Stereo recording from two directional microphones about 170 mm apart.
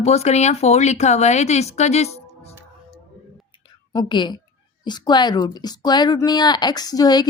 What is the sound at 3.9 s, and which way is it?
Speech, 25° left (ahead or behind).